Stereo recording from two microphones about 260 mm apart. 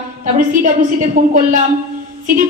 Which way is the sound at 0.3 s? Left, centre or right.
Right.